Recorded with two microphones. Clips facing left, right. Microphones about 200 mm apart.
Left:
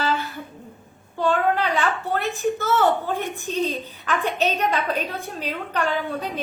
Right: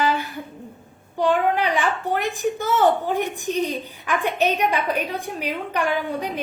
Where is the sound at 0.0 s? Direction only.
15° right (ahead or behind).